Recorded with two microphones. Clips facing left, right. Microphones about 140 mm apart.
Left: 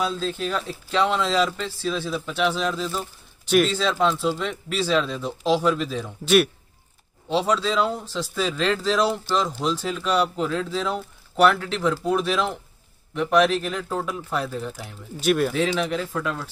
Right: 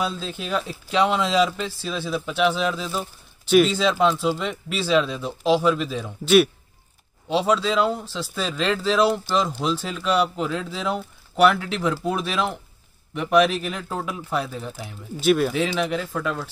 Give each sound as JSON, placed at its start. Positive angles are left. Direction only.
{"t": 0.0, "sound": "speech", "side_deg": -10}